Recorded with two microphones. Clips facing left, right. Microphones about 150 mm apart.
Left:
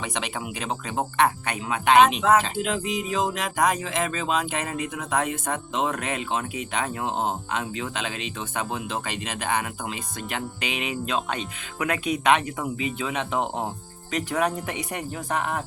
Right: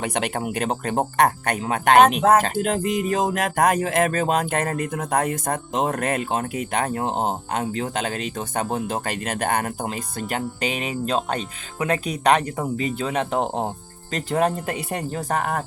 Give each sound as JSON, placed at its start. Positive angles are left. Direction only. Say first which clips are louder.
{"t": 0.0, "sound": "speech", "louder": "right 6 dB", "side_deg": -55}